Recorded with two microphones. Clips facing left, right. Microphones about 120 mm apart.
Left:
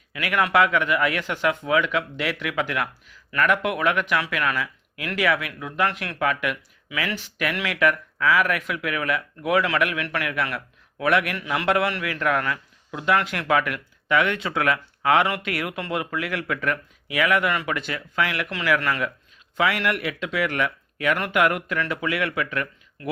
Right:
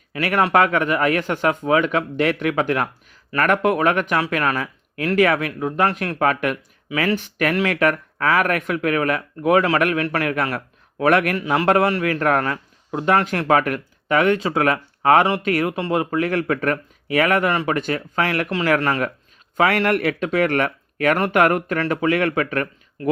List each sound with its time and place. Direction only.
0.1 s speech: 40° right (ahead or behind)